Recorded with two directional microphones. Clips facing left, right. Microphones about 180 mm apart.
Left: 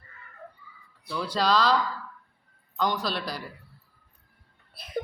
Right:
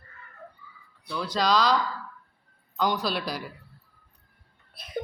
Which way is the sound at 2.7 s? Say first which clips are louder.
Right 1 dB; centre (ahead or behind).